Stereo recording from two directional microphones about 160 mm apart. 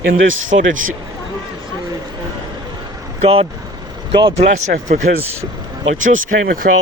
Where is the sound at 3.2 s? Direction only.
40° right (ahead or behind).